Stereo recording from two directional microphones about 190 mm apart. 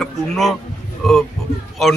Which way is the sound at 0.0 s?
Centre (ahead or behind).